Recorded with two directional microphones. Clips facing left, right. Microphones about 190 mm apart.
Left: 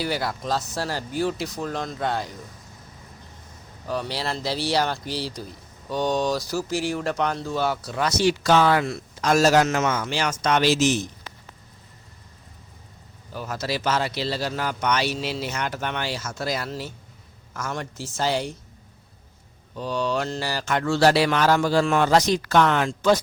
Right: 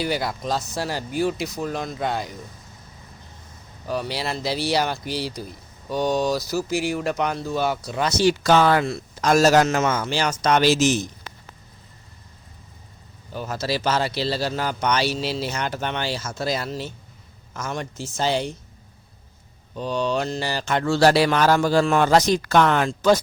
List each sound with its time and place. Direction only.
0.0 s speech: 15° right (ahead or behind)
3.8 s speech: 15° right (ahead or behind)
8.2 s speech: 45° right (ahead or behind)
13.3 s speech: 25° right (ahead or behind)
19.7 s speech: 20° right (ahead or behind); by 23.2 s 40° right (ahead or behind)